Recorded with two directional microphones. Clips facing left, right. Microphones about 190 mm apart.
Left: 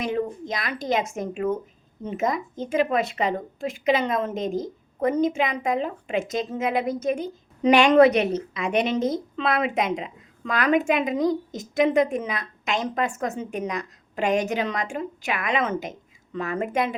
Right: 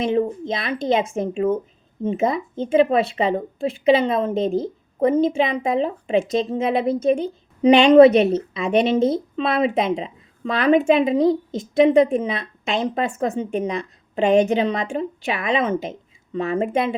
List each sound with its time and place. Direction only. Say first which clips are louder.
0.0 s speech: right 6 dB; 25° right (ahead or behind)